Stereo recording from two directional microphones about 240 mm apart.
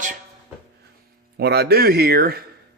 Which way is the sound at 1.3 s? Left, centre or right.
Right.